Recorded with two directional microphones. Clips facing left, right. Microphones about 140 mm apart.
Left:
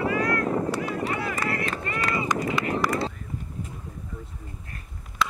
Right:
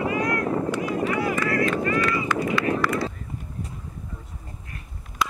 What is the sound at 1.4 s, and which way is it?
Run, 30° left (ahead or behind).